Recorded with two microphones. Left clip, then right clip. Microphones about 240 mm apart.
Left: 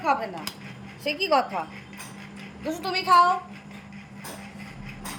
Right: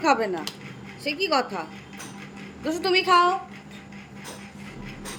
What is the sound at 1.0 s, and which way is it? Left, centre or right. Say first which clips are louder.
Speech: left 1 dB; centre.